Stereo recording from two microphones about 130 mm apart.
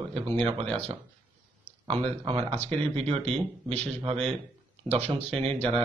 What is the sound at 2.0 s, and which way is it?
Speech, 45° right (ahead or behind).